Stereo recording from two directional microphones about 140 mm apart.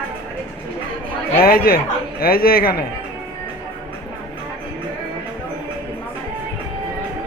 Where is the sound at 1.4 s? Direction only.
90° left.